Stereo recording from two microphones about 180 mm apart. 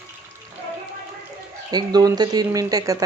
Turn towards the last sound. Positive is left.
turn(degrees=-20)  # may be behind; listen again after turning